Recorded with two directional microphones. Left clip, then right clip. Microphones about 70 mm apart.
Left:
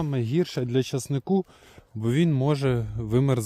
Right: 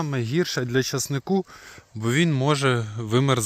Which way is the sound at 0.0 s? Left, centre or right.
Left.